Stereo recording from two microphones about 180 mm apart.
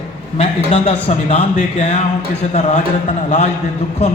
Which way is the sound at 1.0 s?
40° left (ahead or behind).